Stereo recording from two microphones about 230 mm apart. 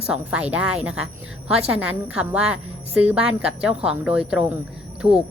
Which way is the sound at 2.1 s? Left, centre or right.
Centre.